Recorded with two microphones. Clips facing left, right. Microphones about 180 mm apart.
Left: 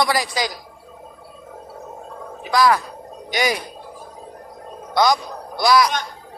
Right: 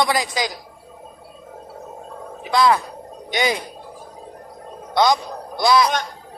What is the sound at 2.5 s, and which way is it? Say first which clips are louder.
Speech: even; 25° right (ahead or behind).